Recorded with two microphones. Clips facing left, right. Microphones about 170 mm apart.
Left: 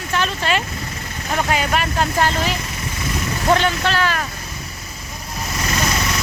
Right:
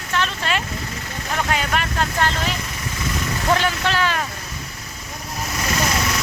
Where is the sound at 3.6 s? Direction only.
15° right (ahead or behind).